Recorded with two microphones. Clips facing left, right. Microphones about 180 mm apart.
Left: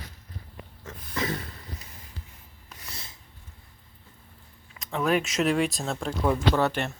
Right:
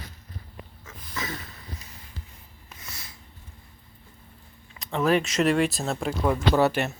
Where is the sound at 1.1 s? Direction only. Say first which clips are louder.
Left 4 dB; 30° left (ahead or behind).